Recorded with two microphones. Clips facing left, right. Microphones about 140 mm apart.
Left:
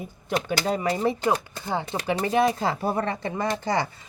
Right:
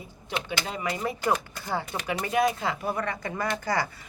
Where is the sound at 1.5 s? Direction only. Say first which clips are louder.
Left 3 dB; 25° left (ahead or behind).